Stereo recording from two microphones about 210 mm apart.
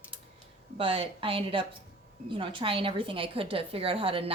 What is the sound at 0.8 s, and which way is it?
A woman's voice, 25° right (ahead or behind).